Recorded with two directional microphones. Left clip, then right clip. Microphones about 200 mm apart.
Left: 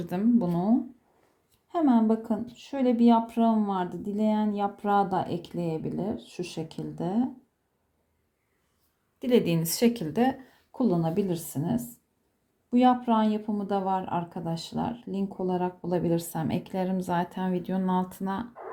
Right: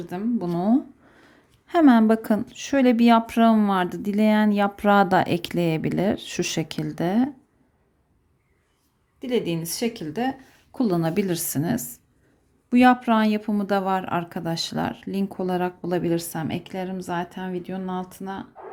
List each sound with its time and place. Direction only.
0.0 s a woman's voice: 5° left (ahead or behind)
0.3 s speech: 5° right (ahead or behind)
1.6 s speech: 25° right (ahead or behind)
9.2 s a woman's voice: 5° left (ahead or behind)
10.7 s speech: 20° right (ahead or behind); by 18.4 s centre (ahead or behind)